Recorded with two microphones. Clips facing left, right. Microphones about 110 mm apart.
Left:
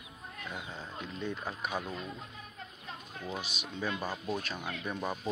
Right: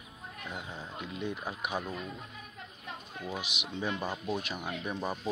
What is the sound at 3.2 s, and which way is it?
Speech, 15° right (ahead or behind).